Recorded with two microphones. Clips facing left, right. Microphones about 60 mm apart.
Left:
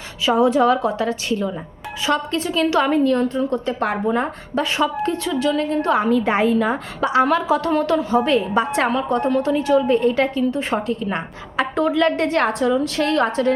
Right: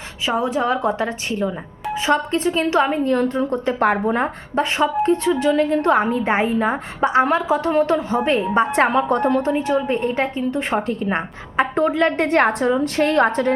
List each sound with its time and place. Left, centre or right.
0.3 s a woman's voice: right
0.8 s a woman's voice: right
3.1 s a woman's voice: right
6.1 s a woman's voice: right